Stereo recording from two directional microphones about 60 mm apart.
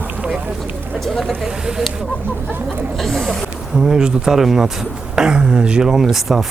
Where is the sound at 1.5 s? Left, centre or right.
Centre.